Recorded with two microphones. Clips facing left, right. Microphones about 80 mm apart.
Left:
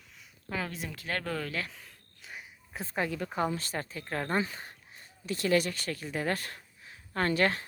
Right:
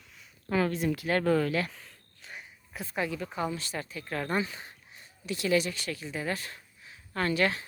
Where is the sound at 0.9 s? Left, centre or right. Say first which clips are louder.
Right 9 dB; centre.